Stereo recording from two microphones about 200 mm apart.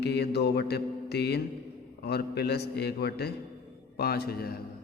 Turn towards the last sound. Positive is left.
turn(degrees=50)  # may be behind; listen again after turning